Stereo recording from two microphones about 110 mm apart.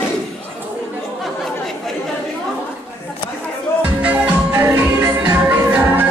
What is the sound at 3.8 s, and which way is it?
Music, 15° right (ahead or behind).